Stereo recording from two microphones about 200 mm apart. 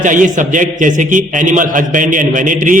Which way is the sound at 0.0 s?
40° right (ahead or behind).